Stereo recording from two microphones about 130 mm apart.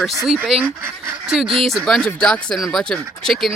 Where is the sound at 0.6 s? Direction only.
20° right (ahead or behind).